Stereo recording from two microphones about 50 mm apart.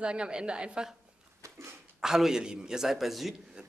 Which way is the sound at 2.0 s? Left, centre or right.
Centre.